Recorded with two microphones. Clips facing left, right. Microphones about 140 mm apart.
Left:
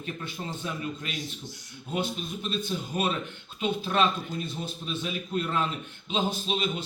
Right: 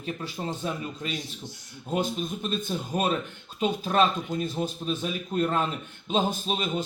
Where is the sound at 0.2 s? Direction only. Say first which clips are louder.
Right 3 dB; 35° right (ahead or behind).